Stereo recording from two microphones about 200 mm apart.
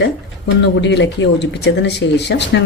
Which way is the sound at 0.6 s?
60° left (ahead or behind).